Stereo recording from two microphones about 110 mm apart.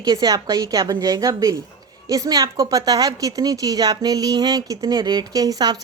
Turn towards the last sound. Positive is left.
turn(degrees=-35)  # may be behind; listen again after turning